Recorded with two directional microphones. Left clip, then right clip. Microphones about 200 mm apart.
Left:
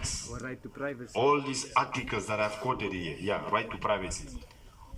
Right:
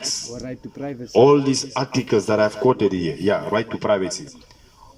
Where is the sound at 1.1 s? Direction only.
45° right (ahead or behind).